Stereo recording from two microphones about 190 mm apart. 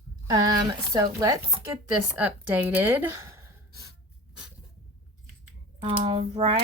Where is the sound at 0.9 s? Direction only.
20° right (ahead or behind).